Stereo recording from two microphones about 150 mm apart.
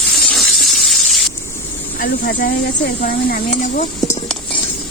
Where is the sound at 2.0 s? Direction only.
70° left (ahead or behind).